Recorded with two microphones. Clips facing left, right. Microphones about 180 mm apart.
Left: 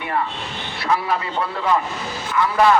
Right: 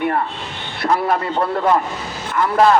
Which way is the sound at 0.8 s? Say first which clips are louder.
Right 4 dB; 50° right (ahead or behind).